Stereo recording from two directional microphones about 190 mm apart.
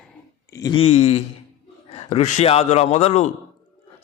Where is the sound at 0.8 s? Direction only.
35° left (ahead or behind).